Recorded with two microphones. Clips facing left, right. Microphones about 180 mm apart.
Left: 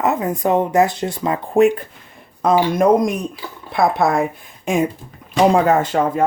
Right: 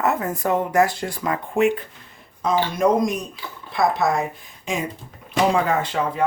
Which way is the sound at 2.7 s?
55° left (ahead or behind).